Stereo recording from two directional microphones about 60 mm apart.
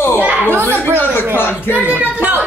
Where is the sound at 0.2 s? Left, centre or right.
Right.